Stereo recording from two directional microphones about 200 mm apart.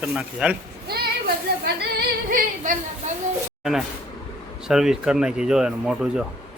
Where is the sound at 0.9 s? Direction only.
50° right (ahead or behind).